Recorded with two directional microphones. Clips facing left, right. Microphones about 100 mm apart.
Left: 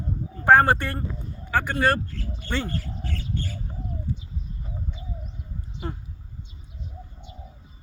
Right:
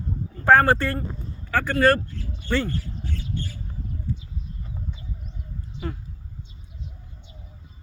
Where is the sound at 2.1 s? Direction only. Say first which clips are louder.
Left 1 dB; 45° left (ahead or behind).